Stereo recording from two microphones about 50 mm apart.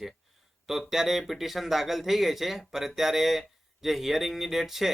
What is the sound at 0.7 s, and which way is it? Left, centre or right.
Speech, centre.